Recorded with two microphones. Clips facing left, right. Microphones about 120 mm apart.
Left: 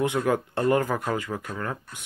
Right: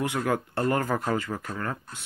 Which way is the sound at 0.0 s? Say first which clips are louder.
Left 3 dB; 20° left (ahead or behind).